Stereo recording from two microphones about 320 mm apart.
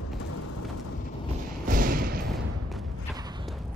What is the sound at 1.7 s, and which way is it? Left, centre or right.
Thump, right.